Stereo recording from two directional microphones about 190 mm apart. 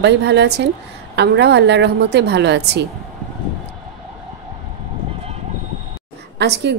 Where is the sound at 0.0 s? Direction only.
65° right (ahead or behind).